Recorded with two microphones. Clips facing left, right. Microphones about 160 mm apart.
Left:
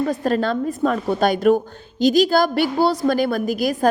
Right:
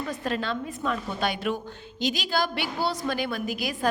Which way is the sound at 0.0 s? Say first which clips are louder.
Left 10 dB; 45° left (ahead or behind).